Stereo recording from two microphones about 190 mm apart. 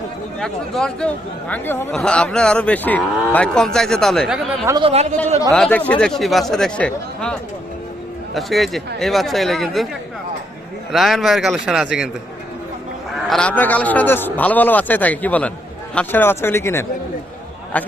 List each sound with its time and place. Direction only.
0.3 s speech: centre (ahead or behind)
4.8 s speech: 35° right (ahead or behind)
5.5 s speech: 5° left (ahead or behind)
10.9 s speech: centre (ahead or behind)
13.2 s a man's voice: 5° left (ahead or behind)